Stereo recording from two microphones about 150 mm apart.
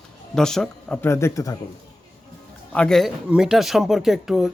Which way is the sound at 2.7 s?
5° left (ahead or behind).